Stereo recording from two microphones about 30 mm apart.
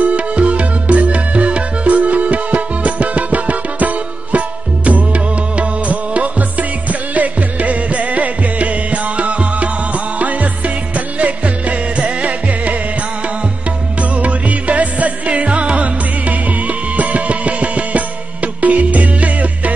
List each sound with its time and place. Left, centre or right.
0.0 s music: right
14.1 s music: right